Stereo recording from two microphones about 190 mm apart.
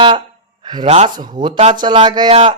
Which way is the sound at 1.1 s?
25° right (ahead or behind).